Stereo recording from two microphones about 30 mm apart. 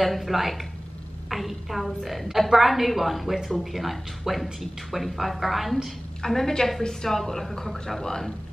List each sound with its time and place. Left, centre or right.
0.0 s speech: centre
6.2 s speech: centre